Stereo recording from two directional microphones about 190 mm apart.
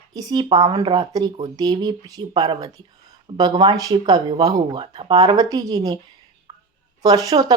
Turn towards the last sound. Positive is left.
turn(degrees=-20)  # may be behind; listen again after turning